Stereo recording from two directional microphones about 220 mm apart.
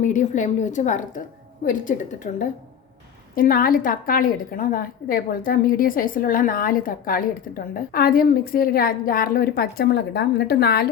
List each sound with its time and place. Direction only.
0.0 s a woman's voice: 35° left (ahead or behind)